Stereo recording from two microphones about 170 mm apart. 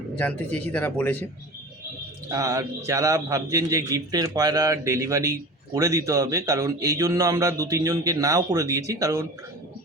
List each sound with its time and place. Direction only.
0.2 s speech: 10° left (ahead or behind)
2.3 s a man's voice: 20° right (ahead or behind)